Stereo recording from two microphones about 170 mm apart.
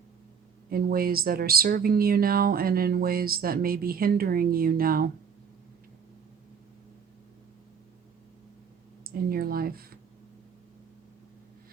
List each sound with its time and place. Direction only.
0.7 s speech: 60° right (ahead or behind)
9.0 s speech: 60° right (ahead or behind)